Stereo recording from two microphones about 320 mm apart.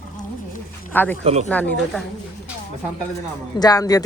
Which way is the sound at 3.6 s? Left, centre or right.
Centre.